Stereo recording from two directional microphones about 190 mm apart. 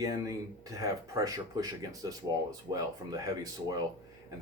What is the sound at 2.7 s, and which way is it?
Speech, 20° right (ahead or behind).